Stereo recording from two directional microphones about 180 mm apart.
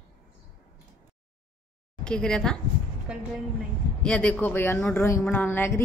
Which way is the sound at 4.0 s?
5° left (ahead or behind).